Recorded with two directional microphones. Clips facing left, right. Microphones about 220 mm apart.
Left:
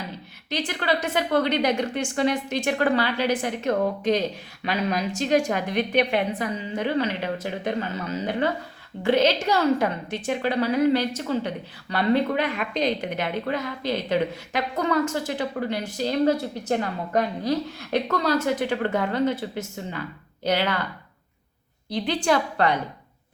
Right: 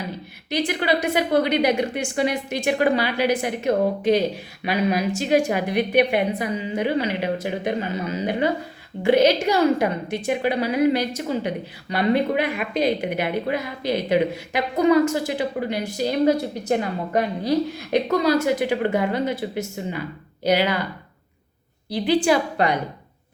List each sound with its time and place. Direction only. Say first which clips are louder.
0.5 s a woman's voice: right 4 dB; 10° right (ahead or behind)
21.8 s a woman's voice: right 4 dB; 10° right (ahead or behind)